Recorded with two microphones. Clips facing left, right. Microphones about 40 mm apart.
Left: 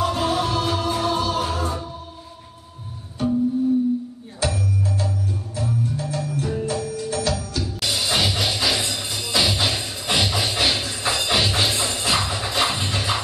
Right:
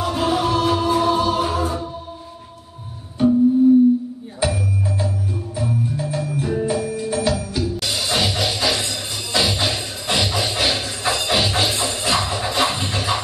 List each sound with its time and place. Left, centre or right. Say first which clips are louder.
0.0 s music: right 2 dB; centre
3.2 s music: right 6 dB; centre
4.4 s music: right 2 dB; centre